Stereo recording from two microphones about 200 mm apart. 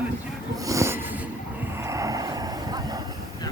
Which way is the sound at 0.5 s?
15° right (ahead or behind).